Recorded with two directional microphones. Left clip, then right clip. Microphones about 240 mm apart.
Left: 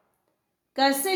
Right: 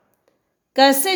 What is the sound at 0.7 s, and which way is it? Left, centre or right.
Speech, right.